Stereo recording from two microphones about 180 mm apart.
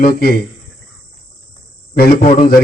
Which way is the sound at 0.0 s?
60° left (ahead or behind).